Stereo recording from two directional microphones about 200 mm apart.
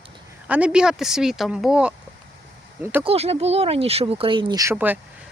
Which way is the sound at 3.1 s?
30° right (ahead or behind).